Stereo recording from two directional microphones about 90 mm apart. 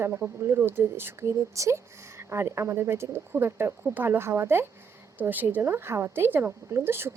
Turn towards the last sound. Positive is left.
turn(degrees=-25)  # may be behind; listen again after turning